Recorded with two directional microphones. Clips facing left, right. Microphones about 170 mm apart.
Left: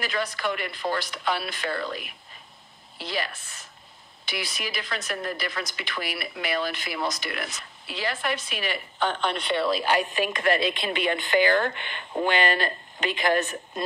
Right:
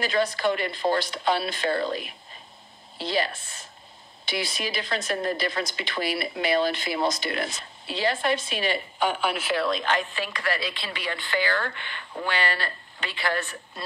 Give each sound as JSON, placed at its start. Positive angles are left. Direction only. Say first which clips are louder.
{"t": 0.0, "sound": "a woman's voice", "louder": "right 5 dB", "side_deg": -30}
{"t": 8.9, "sound": "a woman's voice", "louder": "left 3 dB", "side_deg": -10}